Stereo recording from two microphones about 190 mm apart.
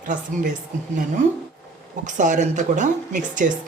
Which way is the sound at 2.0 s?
40° right (ahead or behind).